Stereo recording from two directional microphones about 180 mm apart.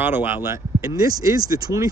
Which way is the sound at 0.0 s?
10° right (ahead or behind).